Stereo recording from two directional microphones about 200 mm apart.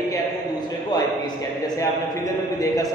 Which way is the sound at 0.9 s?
20° left (ahead or behind).